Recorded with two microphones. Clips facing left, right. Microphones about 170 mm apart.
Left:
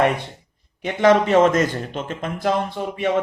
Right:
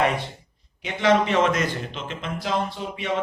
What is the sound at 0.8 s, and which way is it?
A man's voice, 50° left (ahead or behind).